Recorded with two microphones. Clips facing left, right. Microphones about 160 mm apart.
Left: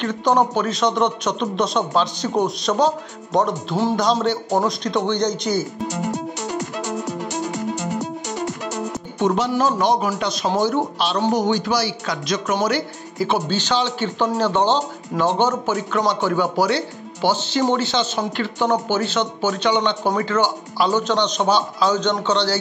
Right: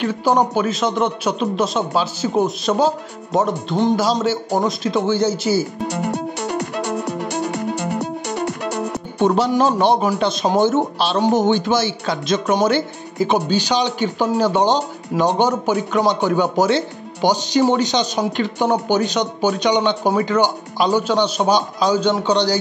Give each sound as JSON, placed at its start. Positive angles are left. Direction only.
{"t": 0.0, "sound": "a man's voice", "side_deg": -5}
{"t": 5.8, "sound": "music", "side_deg": -60}
{"t": 9.2, "sound": "speech", "side_deg": -35}